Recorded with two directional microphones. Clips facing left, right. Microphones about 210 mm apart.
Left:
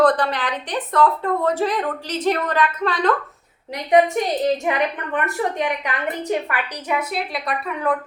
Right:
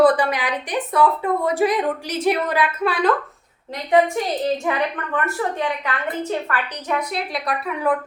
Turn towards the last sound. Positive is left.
turn(degrees=-5)  # may be behind; listen again after turning